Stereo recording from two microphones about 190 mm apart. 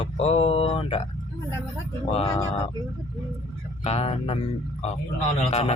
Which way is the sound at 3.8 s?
35° left (ahead or behind).